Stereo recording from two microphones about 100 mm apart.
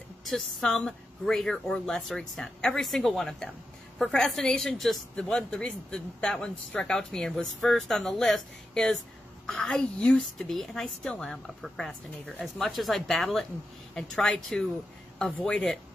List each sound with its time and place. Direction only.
0.2 s a woman's voice: centre (ahead or behind)